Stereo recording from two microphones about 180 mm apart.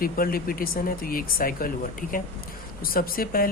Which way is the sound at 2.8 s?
55° left (ahead or behind).